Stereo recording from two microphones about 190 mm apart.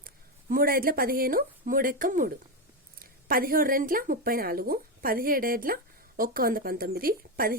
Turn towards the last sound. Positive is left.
turn(degrees=-50)  # may be behind; listen again after turning